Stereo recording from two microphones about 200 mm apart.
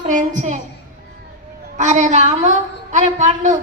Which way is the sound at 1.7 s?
40° right (ahead or behind).